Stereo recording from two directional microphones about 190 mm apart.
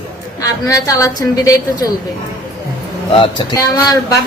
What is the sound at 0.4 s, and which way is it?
A woman's voice, 20° left (ahead or behind).